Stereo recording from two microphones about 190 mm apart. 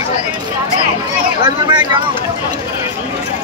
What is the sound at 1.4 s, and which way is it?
Speech, 25° right (ahead or behind).